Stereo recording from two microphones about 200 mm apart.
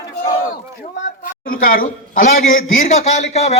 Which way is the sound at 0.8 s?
45° left (ahead or behind).